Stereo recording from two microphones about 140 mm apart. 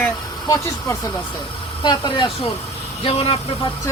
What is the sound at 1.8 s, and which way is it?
Speech, 30° left (ahead or behind).